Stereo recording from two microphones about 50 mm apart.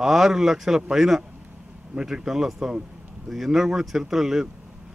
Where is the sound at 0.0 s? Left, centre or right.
Centre.